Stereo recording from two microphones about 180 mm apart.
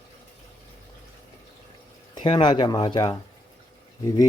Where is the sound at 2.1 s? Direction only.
25° left (ahead or behind).